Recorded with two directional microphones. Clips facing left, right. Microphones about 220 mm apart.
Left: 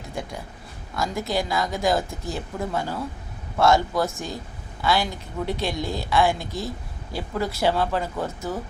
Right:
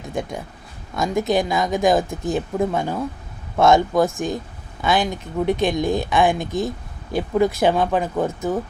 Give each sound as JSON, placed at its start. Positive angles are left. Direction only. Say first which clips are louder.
{"t": 0.1, "sound": "speech", "louder": "right 6 dB", "side_deg": -20}